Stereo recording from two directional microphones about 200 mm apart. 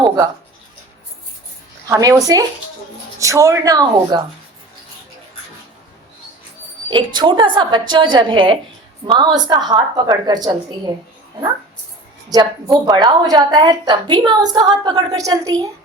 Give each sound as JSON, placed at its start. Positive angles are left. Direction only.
{"t": 1.9, "sound": "a woman's voice", "side_deg": -15}
{"t": 6.9, "sound": "a woman's voice", "side_deg": -25}
{"t": 12.3, "sound": "a woman's voice", "side_deg": -20}